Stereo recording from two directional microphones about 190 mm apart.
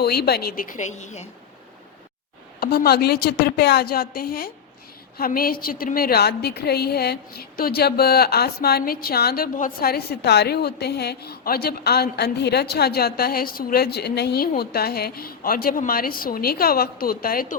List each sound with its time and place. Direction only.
0.0 s a woman's voice: 55° left (ahead or behind); by 1.3 s 35° left (ahead or behind)
2.6 s a woman's voice: 55° left (ahead or behind)